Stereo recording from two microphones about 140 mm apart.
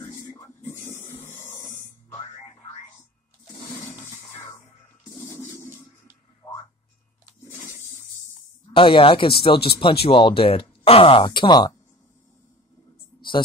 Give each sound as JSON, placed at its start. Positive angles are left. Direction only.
{"t": 5.3, "sound": "toilet flush", "side_deg": 20}
{"t": 6.4, "sound": "music", "side_deg": 30}
{"t": 7.5, "sound": "toilet flush", "side_deg": 60}
{"t": 8.7, "sound": "speech", "side_deg": 40}
{"t": 11.2, "sound": "speech", "side_deg": 30}